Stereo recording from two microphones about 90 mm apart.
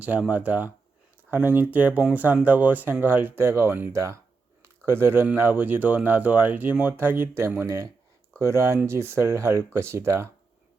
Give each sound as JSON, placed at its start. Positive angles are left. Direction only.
{"t": 0.3, "sound": "speech", "side_deg": -15}